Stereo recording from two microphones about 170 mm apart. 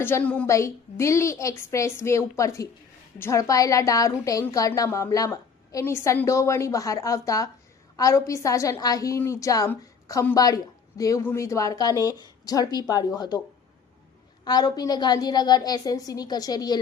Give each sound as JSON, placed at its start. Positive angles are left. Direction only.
{"t": 0.0, "sound": "a woman's voice", "side_deg": 10}
{"t": 14.4, "sound": "a woman's voice", "side_deg": 25}